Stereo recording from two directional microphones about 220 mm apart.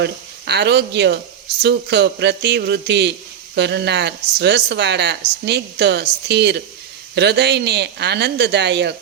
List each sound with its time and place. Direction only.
0.0 s speech: 50° right (ahead or behind)